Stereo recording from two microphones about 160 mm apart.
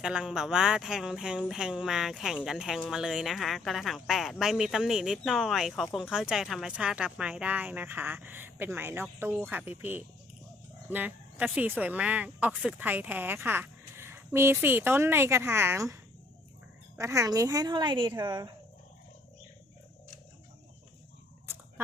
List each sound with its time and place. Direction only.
0.0 s speech: 5° right (ahead or behind)
17.0 s speech: 20° right (ahead or behind)